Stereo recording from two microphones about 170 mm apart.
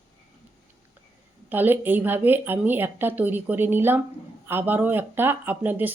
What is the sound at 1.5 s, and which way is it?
Speech, 10° right (ahead or behind).